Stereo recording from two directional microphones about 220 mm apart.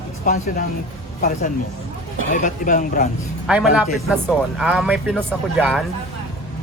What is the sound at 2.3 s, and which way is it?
Speech, 35° left (ahead or behind).